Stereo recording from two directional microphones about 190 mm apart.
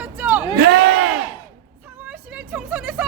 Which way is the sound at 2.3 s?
10° right (ahead or behind).